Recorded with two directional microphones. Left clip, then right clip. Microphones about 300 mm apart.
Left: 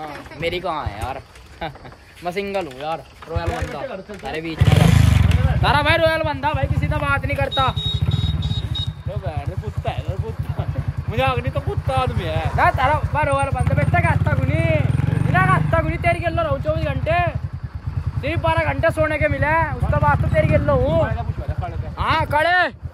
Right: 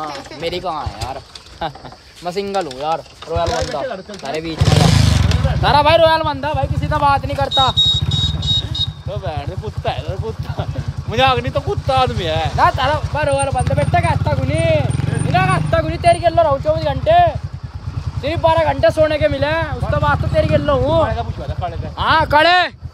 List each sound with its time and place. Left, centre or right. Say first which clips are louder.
0.4 s speech: right 1 dB; centre
2.2 s speech: right 4 dB; centre
4.9 s vehicle: right 4 dB; right
5.6 s speech: right 6 dB; centre
9.8 s a sound: right 6 dB; right
10.6 s speech: right 4 dB; right
12.5 s speech: right 1 dB; centre
21.1 s vehicle: right 6 dB; right
21.9 s speech: right 6 dB; centre
22.3 s speech: right 6 dB; right